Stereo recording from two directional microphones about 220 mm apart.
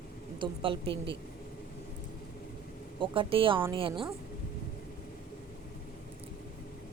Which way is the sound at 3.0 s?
25° right (ahead or behind).